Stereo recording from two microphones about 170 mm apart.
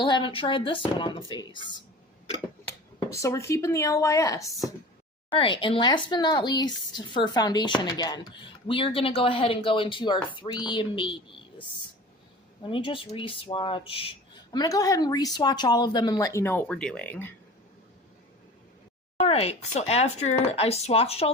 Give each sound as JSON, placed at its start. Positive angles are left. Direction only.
{"t": 0.0, "sound": "speech", "side_deg": 30}
{"t": 3.1, "sound": "a woman's voice", "side_deg": 15}
{"t": 5.3, "sound": "speech", "side_deg": 30}
{"t": 12.6, "sound": "speech", "side_deg": 30}
{"t": 14.5, "sound": "speech", "side_deg": 20}
{"t": 19.2, "sound": "speech", "side_deg": 35}